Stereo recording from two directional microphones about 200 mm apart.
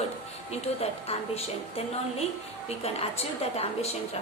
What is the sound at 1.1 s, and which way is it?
A woman's voice, 30° left (ahead or behind).